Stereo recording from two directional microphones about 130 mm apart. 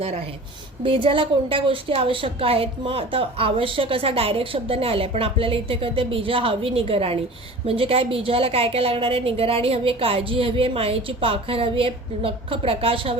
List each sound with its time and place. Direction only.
0.8 s a woman's voice: 40° right (ahead or behind)